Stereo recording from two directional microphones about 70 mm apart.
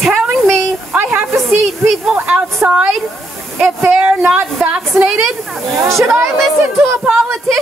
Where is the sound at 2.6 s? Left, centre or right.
Centre.